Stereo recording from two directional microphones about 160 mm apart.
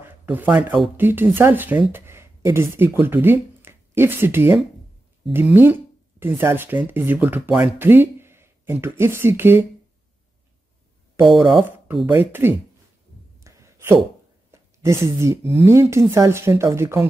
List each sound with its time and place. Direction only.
0.0 s speech: 10° right (ahead or behind)
7.8 s a sound: 15° right (ahead or behind)
8.8 s speech: 15° right (ahead or behind)
12.1 s speech: 15° right (ahead or behind)
13.4 s a sound: 20° right (ahead or behind)
15.5 s speech: 15° right (ahead or behind)